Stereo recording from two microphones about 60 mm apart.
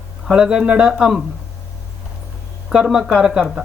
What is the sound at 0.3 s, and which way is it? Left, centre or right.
Speech, centre.